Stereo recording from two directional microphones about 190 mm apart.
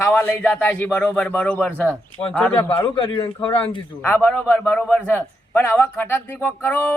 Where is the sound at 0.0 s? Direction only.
10° left (ahead or behind).